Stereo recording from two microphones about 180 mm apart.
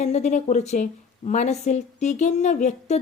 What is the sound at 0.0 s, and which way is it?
A woman's voice, 40° left (ahead or behind).